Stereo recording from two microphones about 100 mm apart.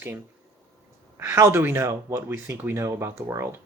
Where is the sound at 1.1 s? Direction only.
25° right (ahead or behind).